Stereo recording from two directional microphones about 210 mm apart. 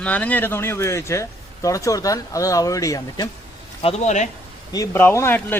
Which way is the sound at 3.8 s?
35° left (ahead or behind).